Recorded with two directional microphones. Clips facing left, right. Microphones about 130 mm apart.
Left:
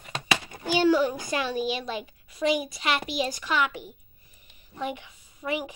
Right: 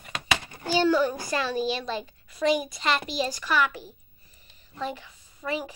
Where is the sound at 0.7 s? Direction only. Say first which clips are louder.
Left 1 dB; 15° left (ahead or behind).